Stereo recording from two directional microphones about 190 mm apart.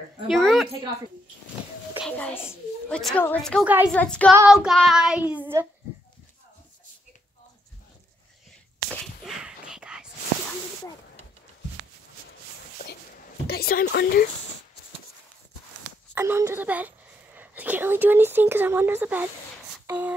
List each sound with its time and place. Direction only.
0.3 s speech: centre (ahead or behind)
2.0 s a woman's voice: 5° left (ahead or behind)
3.0 s child singing: 5° left (ahead or behind)
3.6 s speech: 10° right (ahead or behind)
3.9 s a woman's voice: 5° left (ahead or behind)
4.5 s child singing: centre (ahead or behind)
8.9 s whispering: centre (ahead or behind)
13.5 s speech: 50° left (ahead or behind)
16.2 s speech: 15° right (ahead or behind)